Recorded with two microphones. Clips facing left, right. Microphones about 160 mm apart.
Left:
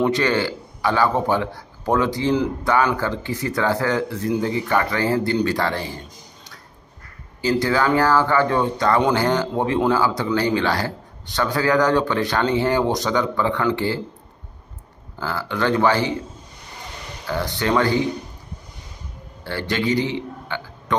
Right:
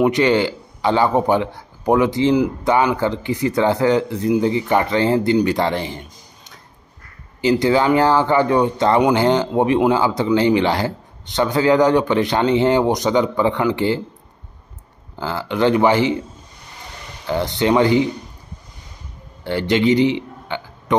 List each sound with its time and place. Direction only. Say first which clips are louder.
0.0 s speech: right 4 dB; 20° right (ahead or behind)
15.1 s speech: right 4 dB; 20° right (ahead or behind)
17.3 s speech: right 4 dB; 20° right (ahead or behind)
19.4 s a man's voice: right 6 dB; 20° right (ahead or behind)